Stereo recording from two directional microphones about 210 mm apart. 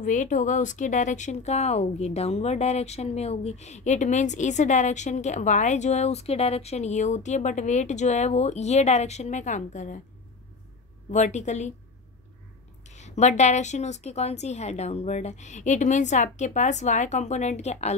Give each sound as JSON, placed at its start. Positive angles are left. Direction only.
{"t": 0.0, "sound": "speech", "side_deg": 35}
{"t": 11.1, "sound": "speech", "side_deg": 35}
{"t": 12.8, "sound": "speech", "side_deg": 35}